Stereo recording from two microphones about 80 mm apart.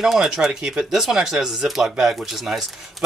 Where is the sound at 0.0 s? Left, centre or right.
Centre.